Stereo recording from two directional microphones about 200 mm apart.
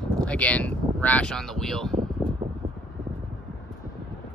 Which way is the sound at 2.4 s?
35° right (ahead or behind).